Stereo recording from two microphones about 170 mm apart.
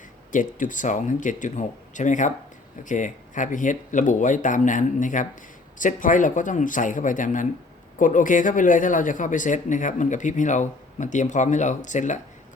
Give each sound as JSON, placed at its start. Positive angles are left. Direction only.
{"t": 0.3, "sound": "speech", "side_deg": 50}